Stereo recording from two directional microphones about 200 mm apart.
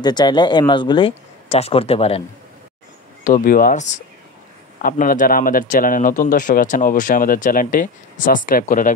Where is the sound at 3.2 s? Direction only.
45° left (ahead or behind).